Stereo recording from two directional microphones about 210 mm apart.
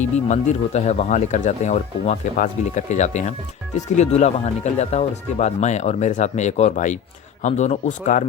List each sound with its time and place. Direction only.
0.0 s speech: 35° left (ahead or behind)